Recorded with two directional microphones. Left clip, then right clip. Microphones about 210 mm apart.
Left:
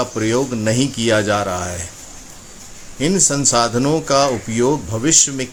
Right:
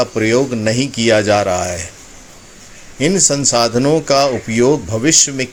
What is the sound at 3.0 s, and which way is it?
Speech, 10° right (ahead or behind).